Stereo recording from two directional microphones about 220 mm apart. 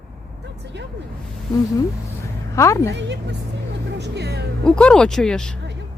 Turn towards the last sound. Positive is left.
turn(degrees=5)  # may be behind; listen again after turning